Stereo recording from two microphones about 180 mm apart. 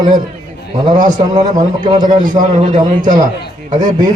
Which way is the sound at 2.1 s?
45° right (ahead or behind).